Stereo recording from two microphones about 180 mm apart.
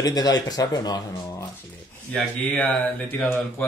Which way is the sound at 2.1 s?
5° left (ahead or behind).